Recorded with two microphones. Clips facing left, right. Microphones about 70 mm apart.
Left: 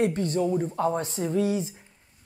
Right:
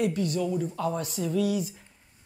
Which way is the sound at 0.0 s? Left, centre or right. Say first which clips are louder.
Left 2 dB; left.